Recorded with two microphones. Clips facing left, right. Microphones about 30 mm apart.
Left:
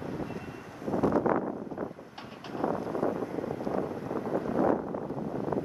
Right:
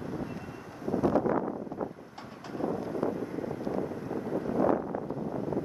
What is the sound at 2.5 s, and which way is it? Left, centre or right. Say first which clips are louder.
Wind noise: left 2 dB; left.